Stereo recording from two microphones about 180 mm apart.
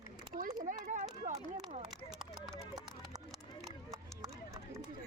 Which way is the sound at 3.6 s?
20° right (ahead or behind).